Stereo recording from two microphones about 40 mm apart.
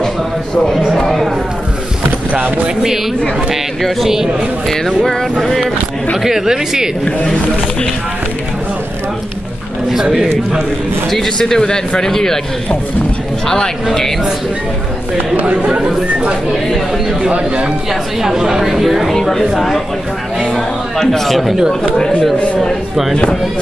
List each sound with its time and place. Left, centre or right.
0.9 s speech: centre
4.6 s speech: centre
6.2 s speech: centre
11.1 s speech: centre
15.3 s speech: right
18.2 s speech: centre
19.1 s a man's voice: centre